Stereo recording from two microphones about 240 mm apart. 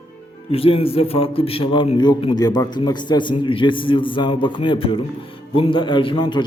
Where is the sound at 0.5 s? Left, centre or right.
Left.